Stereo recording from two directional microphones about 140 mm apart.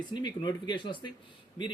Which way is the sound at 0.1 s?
30° left (ahead or behind).